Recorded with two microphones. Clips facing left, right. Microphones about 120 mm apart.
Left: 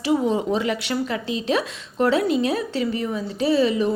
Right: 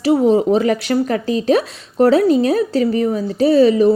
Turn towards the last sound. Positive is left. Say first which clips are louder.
# right 8 dB
turn(degrees=-40)  # may be behind; listen again after turning